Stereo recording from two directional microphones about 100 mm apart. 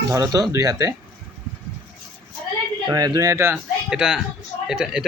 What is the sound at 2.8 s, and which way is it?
Speech, 40° right (ahead or behind).